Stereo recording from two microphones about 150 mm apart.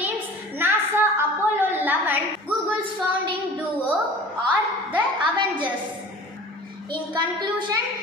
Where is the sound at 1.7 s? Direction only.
10° right (ahead or behind).